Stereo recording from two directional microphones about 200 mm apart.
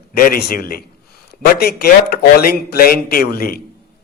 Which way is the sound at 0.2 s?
50° left (ahead or behind).